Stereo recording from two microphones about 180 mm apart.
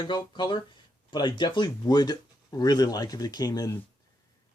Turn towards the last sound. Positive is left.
turn(degrees=20)  # may be behind; listen again after turning